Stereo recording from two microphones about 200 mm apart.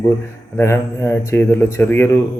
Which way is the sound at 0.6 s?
15° left (ahead or behind).